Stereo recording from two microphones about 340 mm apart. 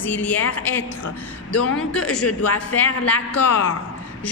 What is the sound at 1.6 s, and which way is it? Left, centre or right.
A woman's voice, left.